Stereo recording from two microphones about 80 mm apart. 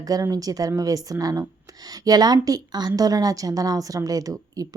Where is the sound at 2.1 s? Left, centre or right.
Right.